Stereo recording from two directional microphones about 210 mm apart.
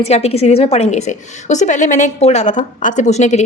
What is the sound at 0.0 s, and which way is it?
A woman's voice, 30° left (ahead or behind).